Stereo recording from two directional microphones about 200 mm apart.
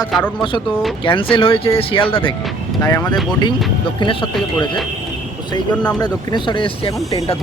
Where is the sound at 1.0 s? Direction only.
25° left (ahead or behind).